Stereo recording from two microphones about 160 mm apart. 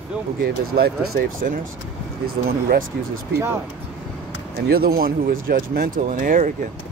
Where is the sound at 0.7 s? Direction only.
70° right (ahead or behind).